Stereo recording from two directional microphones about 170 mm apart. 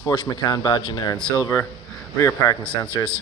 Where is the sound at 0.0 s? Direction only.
25° left (ahead or behind).